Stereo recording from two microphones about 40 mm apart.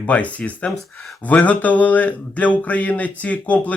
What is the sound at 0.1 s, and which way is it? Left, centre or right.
Speech, left.